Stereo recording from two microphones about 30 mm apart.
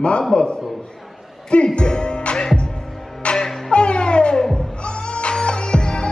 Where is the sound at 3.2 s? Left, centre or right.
Left.